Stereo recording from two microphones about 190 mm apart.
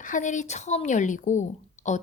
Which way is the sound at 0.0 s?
40° left (ahead or behind).